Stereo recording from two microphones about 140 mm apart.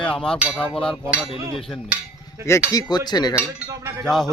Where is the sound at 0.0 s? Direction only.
5° left (ahead or behind).